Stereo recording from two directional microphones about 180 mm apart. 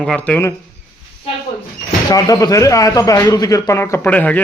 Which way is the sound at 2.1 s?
20° left (ahead or behind).